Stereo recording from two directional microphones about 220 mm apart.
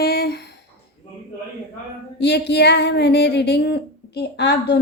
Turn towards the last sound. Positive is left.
turn(degrees=50)  # may be behind; listen again after turning